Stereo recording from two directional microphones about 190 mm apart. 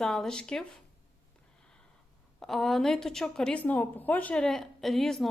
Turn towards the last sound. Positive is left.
turn(degrees=0)  # may be behind; listen again after turning